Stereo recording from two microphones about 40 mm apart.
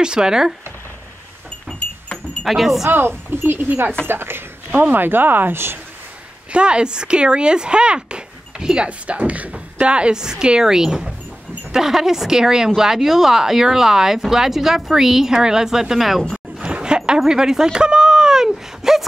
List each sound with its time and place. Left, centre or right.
0.0 s a woman's voice: centre
1.7 s a sound: centre
2.4 s speech: centre
2.9 s speech: right
4.1 s a woman's voice: right
4.7 s speech: right
6.5 s a woman's voice: right
8.8 s a woman's voice: right; by 16.3 s centre
16.6 s a sound: right; by 19.0 s centre